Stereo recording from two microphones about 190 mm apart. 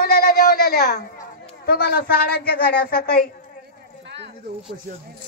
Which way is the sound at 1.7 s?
55° left (ahead or behind).